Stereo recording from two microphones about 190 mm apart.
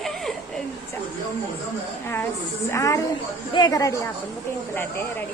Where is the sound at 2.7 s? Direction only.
15° left (ahead or behind).